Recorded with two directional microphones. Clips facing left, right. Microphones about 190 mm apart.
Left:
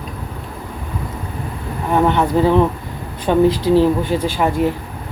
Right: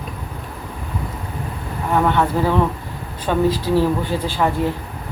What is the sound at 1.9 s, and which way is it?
A woman's voice, 20° left (ahead or behind).